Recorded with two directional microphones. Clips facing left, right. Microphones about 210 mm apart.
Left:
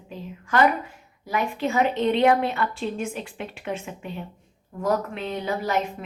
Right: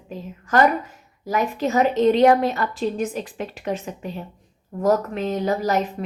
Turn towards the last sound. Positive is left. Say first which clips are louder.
# right 4 dB
turn(degrees=-40)  # may be behind; listen again after turning